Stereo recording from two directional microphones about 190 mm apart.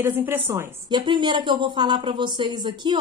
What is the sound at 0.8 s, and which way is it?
Speech, 25° right (ahead or behind).